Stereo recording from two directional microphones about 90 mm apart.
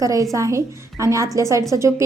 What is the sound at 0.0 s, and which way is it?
A woman's voice, 40° right (ahead or behind).